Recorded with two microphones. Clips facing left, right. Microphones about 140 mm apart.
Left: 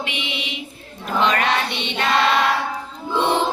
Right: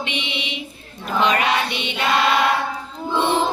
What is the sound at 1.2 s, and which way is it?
Mantra, 5° right (ahead or behind).